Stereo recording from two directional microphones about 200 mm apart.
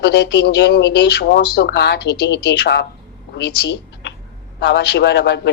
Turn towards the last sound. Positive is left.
turn(degrees=60)  # may be behind; listen again after turning